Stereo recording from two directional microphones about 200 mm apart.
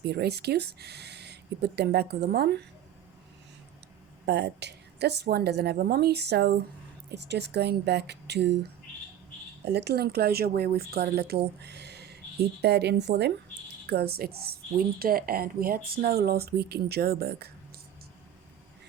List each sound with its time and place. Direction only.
0.0 s speech: 55° right (ahead or behind)
4.3 s speech: 60° right (ahead or behind)
9.6 s speech: 55° right (ahead or behind)
11.6 s a sound: 55° right (ahead or behind)
12.6 s speech: 55° right (ahead or behind)